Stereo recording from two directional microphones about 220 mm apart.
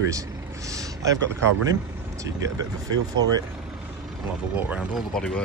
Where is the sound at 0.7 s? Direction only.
15° right (ahead or behind).